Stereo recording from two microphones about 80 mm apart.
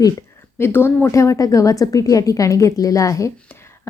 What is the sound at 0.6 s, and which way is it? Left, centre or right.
A woman's voice, left.